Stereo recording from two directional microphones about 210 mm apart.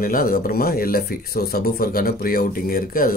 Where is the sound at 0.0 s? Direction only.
45° left (ahead or behind).